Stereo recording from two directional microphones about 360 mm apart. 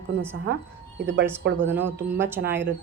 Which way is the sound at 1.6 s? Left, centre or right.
Centre.